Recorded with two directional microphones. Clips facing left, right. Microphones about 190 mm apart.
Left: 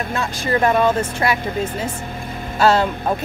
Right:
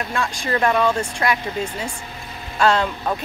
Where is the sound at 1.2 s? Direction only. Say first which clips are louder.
Left 1 dB; 25° left (ahead or behind).